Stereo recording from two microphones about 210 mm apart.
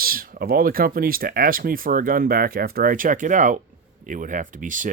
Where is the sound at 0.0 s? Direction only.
45° right (ahead or behind).